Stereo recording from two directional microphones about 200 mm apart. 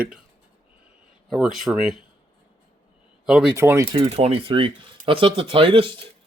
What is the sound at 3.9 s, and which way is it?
Speech, 30° right (ahead or behind).